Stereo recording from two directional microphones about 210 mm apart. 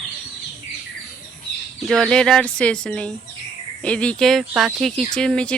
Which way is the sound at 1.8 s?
Centre (ahead or behind).